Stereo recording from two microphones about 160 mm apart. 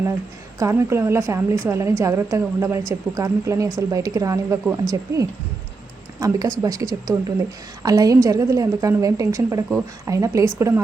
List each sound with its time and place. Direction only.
0.6 s a woman's voice: 20° right (ahead or behind)